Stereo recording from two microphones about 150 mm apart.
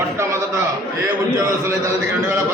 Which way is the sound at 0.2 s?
20° right (ahead or behind).